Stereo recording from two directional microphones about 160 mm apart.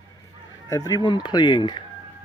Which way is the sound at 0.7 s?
20° left (ahead or behind).